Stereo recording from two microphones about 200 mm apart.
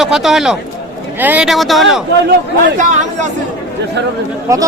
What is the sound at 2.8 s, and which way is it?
Speech, 40° right (ahead or behind).